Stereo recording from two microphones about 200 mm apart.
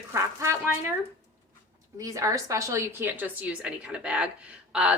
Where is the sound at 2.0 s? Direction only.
15° right (ahead or behind).